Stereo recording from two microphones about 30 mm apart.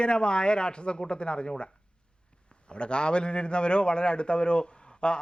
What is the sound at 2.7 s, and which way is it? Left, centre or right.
A man's voice, left.